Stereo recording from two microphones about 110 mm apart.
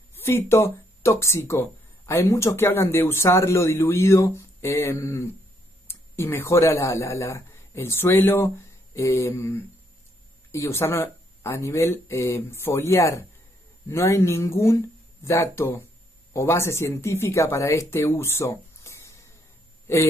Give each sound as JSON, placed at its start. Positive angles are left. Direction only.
{"t": 0.1, "sound": "speech", "side_deg": 20}